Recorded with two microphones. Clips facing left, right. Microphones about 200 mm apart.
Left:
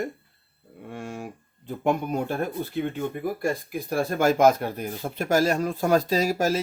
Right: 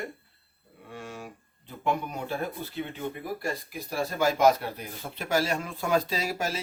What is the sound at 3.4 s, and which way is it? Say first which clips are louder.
Speech: left 6 dB; 55° left (ahead or behind).